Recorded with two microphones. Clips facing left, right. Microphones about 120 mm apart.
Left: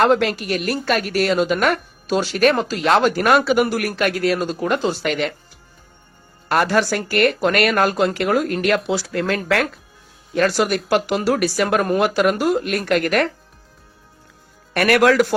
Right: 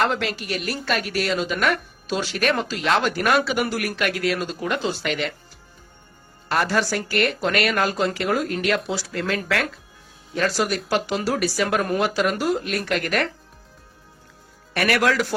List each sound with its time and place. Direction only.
0.0 s speech: 50° left (ahead or behind)
6.5 s speech: 60° left (ahead or behind)
14.7 s speech: 50° left (ahead or behind)